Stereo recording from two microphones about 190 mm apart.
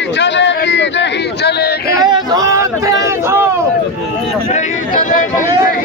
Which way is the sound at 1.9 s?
20° right (ahead or behind).